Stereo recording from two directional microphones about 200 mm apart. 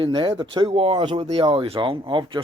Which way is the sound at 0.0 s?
25° right (ahead or behind).